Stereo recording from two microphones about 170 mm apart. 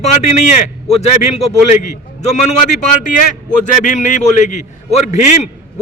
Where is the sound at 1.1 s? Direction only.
40° left (ahead or behind).